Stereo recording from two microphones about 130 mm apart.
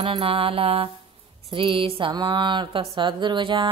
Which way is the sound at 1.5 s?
40° right (ahead or behind).